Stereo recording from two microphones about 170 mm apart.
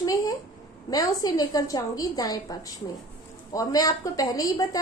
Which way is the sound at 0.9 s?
20° left (ahead or behind).